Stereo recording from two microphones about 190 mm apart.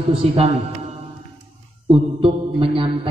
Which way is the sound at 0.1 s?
30° right (ahead or behind).